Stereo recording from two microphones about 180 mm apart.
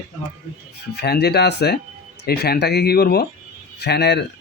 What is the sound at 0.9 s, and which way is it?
Speech, 65° left (ahead or behind).